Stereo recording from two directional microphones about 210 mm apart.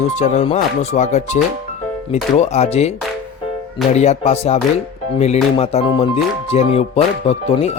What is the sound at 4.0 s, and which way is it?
Speech, 30° left (ahead or behind).